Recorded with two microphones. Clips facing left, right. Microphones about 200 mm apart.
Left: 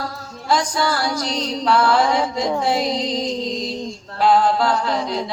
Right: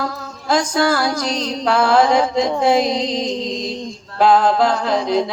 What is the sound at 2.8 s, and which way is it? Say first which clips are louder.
Mantra: right 2 dB; 20° right (ahead or behind).